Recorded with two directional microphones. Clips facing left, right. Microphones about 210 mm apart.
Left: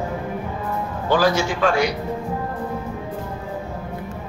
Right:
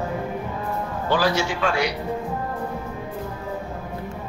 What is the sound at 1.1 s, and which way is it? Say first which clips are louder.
Speech: left 3 dB; 45° left (ahead or behind).